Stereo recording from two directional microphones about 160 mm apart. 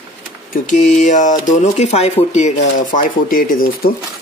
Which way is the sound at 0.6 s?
50° left (ahead or behind).